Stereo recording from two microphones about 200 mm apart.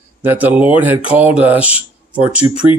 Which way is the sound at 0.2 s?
10° right (ahead or behind).